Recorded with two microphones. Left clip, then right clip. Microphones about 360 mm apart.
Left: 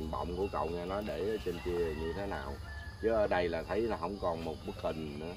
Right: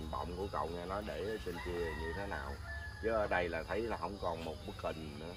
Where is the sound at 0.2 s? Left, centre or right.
Left.